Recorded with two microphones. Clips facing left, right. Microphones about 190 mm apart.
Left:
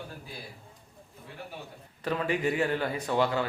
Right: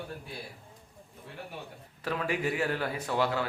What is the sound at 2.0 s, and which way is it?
A man's voice, 5° right (ahead or behind).